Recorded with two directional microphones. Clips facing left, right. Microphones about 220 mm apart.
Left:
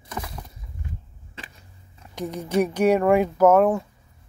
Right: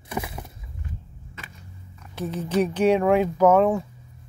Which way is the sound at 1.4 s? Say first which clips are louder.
Left 2 dB; 30° left (ahead or behind).